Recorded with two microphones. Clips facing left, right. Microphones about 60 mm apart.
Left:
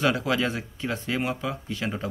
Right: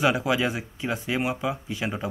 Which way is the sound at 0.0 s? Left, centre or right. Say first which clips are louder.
Right 1 dB; centre.